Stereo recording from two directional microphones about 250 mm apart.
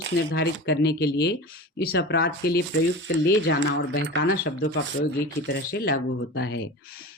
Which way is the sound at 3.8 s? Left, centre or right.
Left.